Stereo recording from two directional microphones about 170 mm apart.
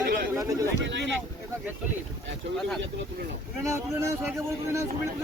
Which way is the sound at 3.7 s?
15° right (ahead or behind).